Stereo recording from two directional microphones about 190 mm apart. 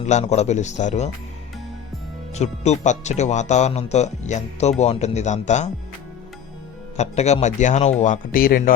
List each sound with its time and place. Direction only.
0.0 s speech: 35° left (ahead or behind)
2.3 s speech: 35° left (ahead or behind)
6.9 s speech: 35° left (ahead or behind)